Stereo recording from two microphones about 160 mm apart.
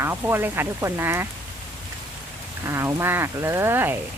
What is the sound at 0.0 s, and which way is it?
Speech, 15° right (ahead or behind).